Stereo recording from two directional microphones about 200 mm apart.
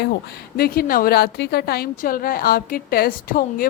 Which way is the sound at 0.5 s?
50° left (ahead or behind).